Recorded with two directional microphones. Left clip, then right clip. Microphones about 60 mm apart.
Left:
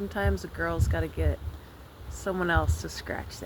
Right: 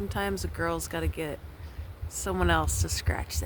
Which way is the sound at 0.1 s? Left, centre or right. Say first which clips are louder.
Left 1 dB; right.